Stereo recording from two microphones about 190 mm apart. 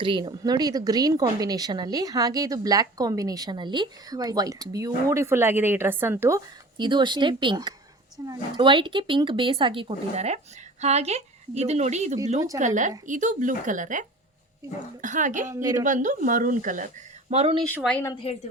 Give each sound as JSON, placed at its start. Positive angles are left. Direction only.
{"t": 0.0, "sound": "a woman's voice", "side_deg": -25}
{"t": 15.5, "sound": "a woman's voice", "side_deg": -20}
{"t": 15.8, "sound": "speech", "side_deg": -40}
{"t": 17.6, "sound": "a woman's voice", "side_deg": 5}
{"t": 18.3, "sound": "a woman's voice", "side_deg": 30}